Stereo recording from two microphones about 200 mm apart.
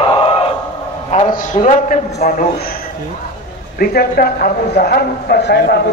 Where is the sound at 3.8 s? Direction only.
50° left (ahead or behind).